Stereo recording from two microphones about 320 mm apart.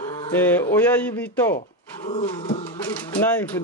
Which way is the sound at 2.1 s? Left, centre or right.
Centre.